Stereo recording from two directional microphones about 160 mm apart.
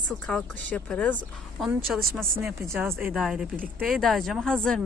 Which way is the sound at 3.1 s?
Centre (ahead or behind).